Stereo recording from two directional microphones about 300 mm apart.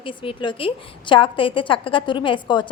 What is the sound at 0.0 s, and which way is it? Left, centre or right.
A woman's voice, centre.